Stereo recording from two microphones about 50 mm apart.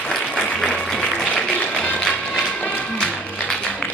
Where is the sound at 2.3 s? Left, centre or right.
Centre.